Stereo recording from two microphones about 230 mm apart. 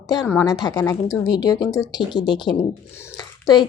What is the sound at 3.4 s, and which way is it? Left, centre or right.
Speech, centre.